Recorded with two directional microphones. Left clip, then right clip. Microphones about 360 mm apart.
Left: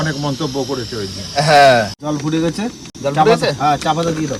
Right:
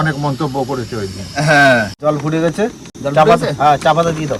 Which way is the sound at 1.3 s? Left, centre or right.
Left.